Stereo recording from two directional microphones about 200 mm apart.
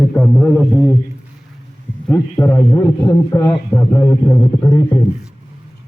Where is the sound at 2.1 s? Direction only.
15° left (ahead or behind).